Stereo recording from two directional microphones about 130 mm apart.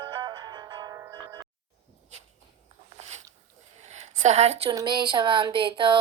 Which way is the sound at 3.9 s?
60° right (ahead or behind).